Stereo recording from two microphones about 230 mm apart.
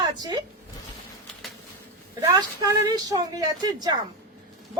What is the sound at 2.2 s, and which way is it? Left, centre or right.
A woman's voice, centre.